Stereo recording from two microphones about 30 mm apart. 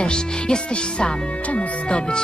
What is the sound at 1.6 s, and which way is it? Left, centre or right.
Speech, left.